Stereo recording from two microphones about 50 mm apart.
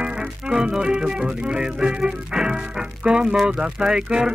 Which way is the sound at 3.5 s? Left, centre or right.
Centre.